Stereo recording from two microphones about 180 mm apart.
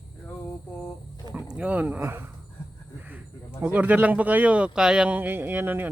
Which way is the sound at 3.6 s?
10° right (ahead or behind).